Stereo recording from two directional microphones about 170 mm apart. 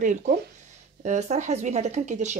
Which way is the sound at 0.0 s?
50° right (ahead or behind).